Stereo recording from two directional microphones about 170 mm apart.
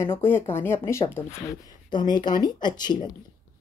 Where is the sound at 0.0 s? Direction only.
15° left (ahead or behind).